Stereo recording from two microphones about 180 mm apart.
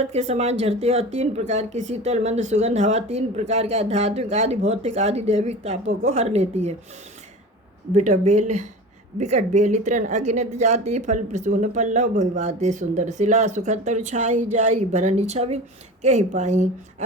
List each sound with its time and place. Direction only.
0.0 s speech: 35° right (ahead or behind)
7.9 s speech: 40° right (ahead or behind)